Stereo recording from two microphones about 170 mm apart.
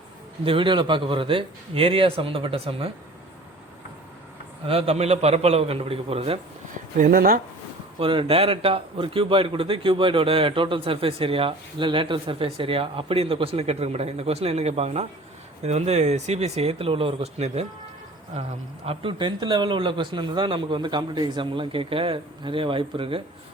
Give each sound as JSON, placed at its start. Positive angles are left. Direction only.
{"t": 0.4, "sound": "a man's voice", "side_deg": -30}
{"t": 4.6, "sound": "a man's voice", "side_deg": -35}
{"t": 7.0, "sound": "speech", "side_deg": -55}
{"t": 7.9, "sound": "a man's voice", "side_deg": -30}
{"t": 18.9, "sound": "speech", "side_deg": -30}